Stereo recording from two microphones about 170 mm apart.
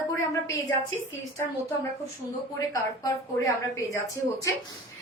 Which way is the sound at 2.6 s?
20° left (ahead or behind).